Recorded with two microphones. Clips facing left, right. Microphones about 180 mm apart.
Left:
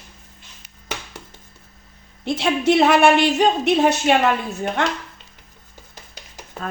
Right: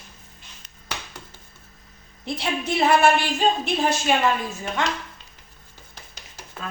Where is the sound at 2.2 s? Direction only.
85° left; by 4.8 s 60° left (ahead or behind).